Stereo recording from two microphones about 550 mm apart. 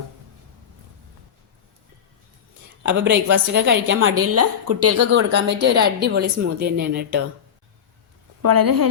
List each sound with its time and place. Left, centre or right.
2.8 s a woman's voice: centre
8.4 s speech: right